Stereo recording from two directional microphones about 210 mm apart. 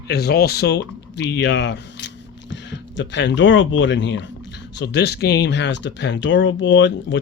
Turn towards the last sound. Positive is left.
turn(degrees=60)  # may be behind; listen again after turning